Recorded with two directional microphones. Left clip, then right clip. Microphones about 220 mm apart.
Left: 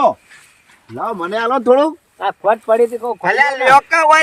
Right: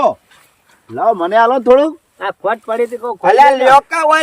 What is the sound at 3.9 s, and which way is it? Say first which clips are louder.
Speech: left 2 dB; 45° right (ahead or behind).